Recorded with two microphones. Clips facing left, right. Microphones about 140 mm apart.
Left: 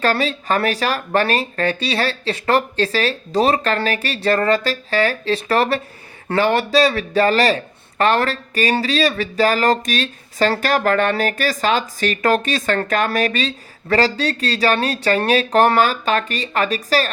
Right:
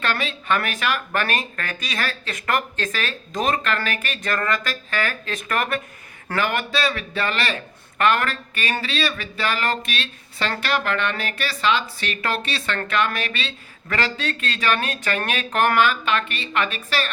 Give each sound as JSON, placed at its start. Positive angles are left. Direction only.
{"t": 0.0, "sound": "speech", "side_deg": 35}